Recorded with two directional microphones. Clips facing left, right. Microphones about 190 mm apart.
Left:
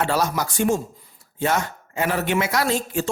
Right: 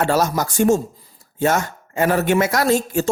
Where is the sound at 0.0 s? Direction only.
45° right (ahead or behind).